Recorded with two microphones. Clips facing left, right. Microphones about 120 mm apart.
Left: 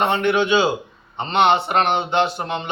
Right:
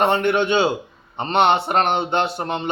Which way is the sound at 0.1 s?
50° right (ahead or behind).